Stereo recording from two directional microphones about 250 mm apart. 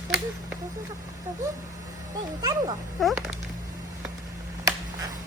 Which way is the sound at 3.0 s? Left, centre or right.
Centre.